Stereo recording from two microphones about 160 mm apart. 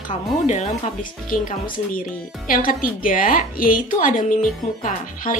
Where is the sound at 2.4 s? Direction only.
60° left (ahead or behind).